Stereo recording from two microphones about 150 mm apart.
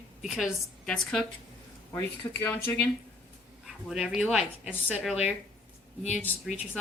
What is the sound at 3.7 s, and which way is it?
A woman's voice, 5° right (ahead or behind).